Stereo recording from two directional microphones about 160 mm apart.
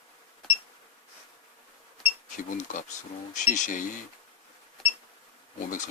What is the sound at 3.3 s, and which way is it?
Speech, 50° left (ahead or behind).